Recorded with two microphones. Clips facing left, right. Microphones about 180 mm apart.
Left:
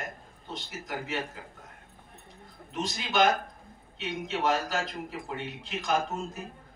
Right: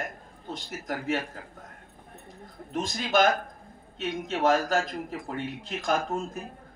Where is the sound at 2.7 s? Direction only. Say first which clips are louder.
Right 3 dB; 45° right (ahead or behind).